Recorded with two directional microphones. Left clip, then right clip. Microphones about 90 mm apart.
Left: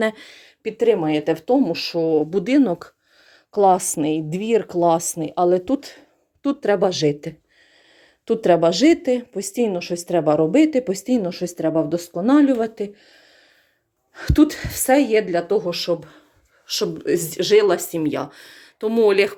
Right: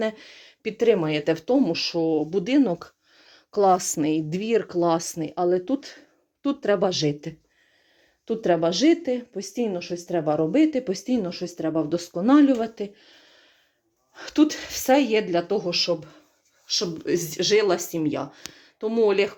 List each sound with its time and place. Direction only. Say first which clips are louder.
0.0 s speech: left 5 dB; 30° left (ahead or behind)
0.3 s a sound: left 2 dB; 10° left (ahead or behind)
0.6 s speech: left 3 dB; 5° right (ahead or behind)
2.0 s speech: left 6 dB; 25° left (ahead or behind)
3.2 s a sound: left 4 dB; 5° left (ahead or behind)
3.8 s speech: left 3 dB; 15° left (ahead or behind)
4.0 s speech: left 2 dB; 5° left (ahead or behind); by 5.8 s 40° left (ahead or behind)
5.8 s speech: left 3 dB; 25° left (ahead or behind)
8.2 s a woman's voice: left 7 dB; 70° left (ahead or behind)
8.4 s speech: left 5 dB; 40° left (ahead or behind)
11.7 s speech: left 4 dB; 20° left (ahead or behind)
11.9 s speech: right 2 dB; 10° left (ahead or behind)
14.2 s speech: left 5 dB; 35° left (ahead or behind)
14.4 s speech: left 1 dB; 20° left (ahead or behind)